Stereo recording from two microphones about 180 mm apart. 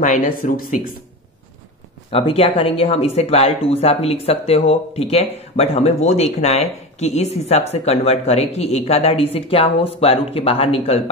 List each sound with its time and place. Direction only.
0.0 s speech: 50° left (ahead or behind)
2.1 s speech: 35° left (ahead or behind)